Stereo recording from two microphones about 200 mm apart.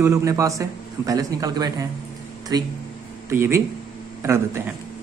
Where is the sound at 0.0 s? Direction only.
15° right (ahead or behind).